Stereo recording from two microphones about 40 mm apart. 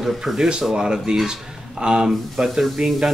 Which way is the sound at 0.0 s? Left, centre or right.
Centre.